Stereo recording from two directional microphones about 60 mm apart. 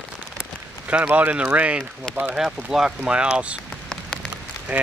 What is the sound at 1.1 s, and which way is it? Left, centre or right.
Speech, right.